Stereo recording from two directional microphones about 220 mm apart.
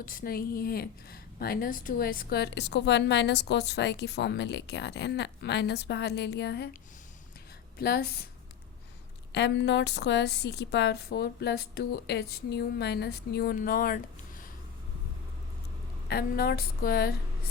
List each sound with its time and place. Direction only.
0.0 s a woman's voice: 40° left (ahead or behind)
7.8 s a woman's voice: 45° left (ahead or behind)
9.3 s a woman's voice: 50° left (ahead or behind)
16.0 s a woman's voice: 45° left (ahead or behind)